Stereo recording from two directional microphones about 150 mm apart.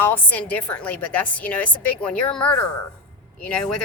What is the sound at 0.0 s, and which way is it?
A woman's voice, 10° left (ahead or behind).